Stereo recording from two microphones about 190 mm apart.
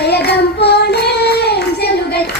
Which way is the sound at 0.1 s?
60° left (ahead or behind).